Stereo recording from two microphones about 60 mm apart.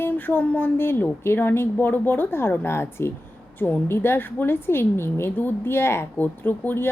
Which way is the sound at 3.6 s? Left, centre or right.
Left.